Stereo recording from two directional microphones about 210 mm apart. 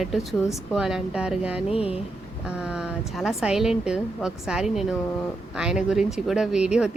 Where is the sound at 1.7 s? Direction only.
30° left (ahead or behind).